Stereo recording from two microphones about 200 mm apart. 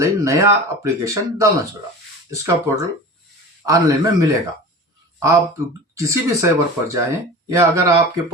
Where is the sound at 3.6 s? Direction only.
15° right (ahead or behind).